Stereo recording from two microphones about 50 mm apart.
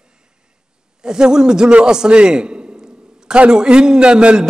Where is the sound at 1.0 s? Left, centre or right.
Centre.